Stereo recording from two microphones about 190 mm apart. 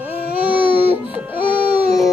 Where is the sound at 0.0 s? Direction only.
10° right (ahead or behind).